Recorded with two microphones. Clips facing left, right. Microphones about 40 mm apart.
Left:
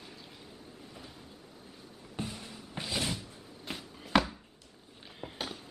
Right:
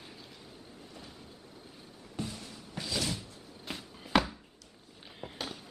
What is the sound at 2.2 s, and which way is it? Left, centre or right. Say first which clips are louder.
Music: even; centre.